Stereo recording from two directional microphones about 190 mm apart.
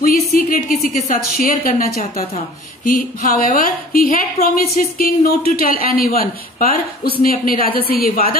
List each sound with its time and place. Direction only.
0.0 s a woman's voice: 50° left (ahead or behind)